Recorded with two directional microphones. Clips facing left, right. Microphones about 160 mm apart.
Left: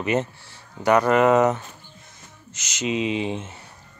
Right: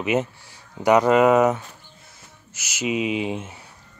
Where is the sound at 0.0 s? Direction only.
5° right (ahead or behind).